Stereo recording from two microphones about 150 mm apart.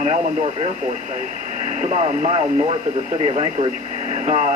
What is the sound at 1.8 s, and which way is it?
Speech, 55° right (ahead or behind).